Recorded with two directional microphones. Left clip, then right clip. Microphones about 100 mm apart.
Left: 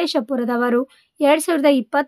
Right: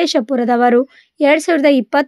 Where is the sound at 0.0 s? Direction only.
30° right (ahead or behind).